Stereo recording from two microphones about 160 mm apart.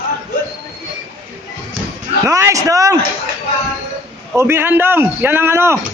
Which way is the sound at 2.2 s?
20° right (ahead or behind).